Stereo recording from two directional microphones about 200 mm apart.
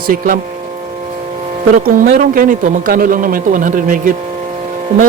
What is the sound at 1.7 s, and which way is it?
A man's voice, 40° right (ahead or behind).